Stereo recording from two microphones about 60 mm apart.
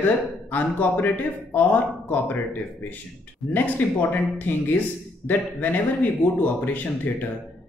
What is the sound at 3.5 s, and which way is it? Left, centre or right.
A man's voice, left.